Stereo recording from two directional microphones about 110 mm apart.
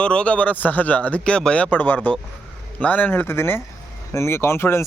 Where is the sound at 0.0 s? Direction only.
10° left (ahead or behind).